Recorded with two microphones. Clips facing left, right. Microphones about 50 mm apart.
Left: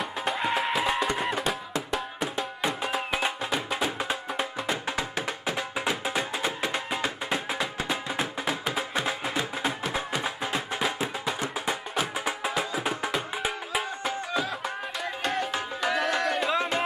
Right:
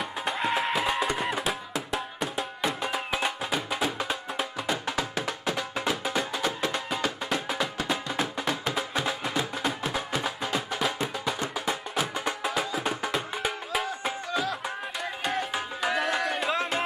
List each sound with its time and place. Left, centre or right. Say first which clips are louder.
0.2 s music: even; centre
7.9 s music: right 1 dB; centre
10.8 s music: even; centre